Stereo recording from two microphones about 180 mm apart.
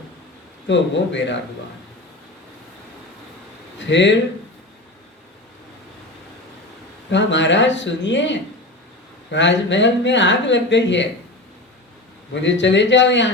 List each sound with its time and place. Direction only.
0.7 s speech: 80° left
3.8 s speech: 80° left
7.1 s speech: 85° left
12.3 s speech: 85° left